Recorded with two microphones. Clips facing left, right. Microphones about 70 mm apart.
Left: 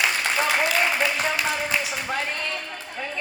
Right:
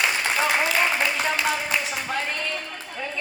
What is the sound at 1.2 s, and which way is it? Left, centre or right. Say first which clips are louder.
Speech: right 1 dB; centre.